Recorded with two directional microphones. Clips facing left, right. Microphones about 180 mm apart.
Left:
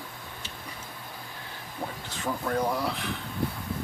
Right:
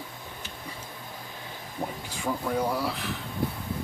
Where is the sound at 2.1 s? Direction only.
10° right (ahead or behind).